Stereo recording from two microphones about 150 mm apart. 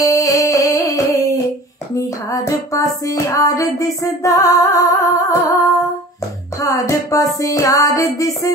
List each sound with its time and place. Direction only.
0.0 s music: 20° left (ahead or behind)
6.6 s music: 20° left (ahead or behind)